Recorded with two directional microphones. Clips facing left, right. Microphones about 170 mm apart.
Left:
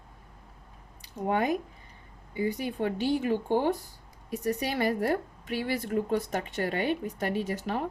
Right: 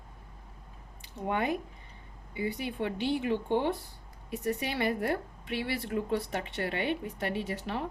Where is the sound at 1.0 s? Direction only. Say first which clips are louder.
Left 3 dB; 40° left (ahead or behind).